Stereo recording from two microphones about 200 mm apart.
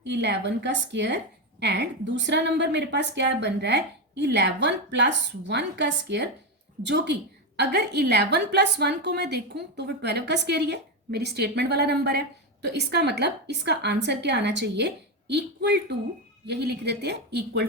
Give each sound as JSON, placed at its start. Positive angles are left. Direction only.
{"t": 0.0, "sound": "a woman's voice", "side_deg": -60}